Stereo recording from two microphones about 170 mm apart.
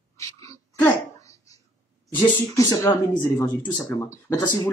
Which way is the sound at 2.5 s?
20° left (ahead or behind).